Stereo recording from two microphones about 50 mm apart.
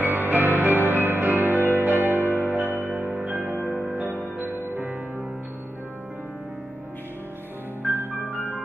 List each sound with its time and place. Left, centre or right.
0.0 s music: right
4.4 s music: right
7.8 s music: right